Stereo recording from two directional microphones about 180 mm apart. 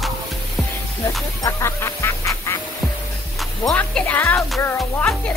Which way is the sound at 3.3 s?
Centre (ahead or behind).